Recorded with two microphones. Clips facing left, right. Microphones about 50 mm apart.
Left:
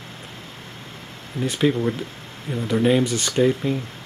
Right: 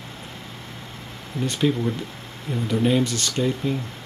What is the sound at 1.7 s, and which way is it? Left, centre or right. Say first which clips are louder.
Speech: left 2 dB; centre.